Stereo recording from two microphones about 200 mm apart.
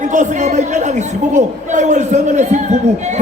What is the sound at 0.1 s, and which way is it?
A man's voice, 40° right (ahead or behind).